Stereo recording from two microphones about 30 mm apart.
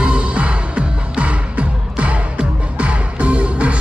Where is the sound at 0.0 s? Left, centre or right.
Right.